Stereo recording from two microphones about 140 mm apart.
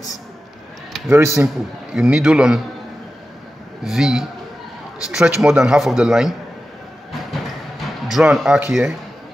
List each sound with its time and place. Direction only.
1.1 s a man's voice: 20° right (ahead or behind)
2.0 s a man's voice: 5° right (ahead or behind)
3.8 s a man's voice: 5° right (ahead or behind)
8.1 s a man's voice: 5° right (ahead or behind)